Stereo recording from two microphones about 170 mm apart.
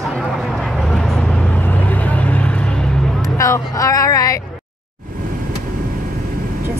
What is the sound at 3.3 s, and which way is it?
Speech, 20° left (ahead or behind).